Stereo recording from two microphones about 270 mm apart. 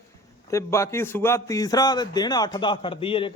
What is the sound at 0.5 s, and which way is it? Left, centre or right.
Speech, centre.